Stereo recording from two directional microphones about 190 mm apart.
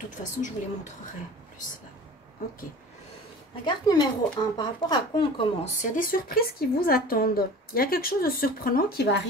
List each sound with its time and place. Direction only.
0.2 s a woman's voice: 40° left (ahead or behind)
3.6 s speech: 20° left (ahead or behind)
5.8 s speech: 45° left (ahead or behind)